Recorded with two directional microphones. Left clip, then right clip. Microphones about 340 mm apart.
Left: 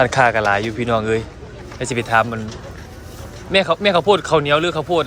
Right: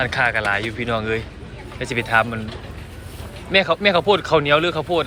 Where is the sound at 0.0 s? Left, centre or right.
Centre.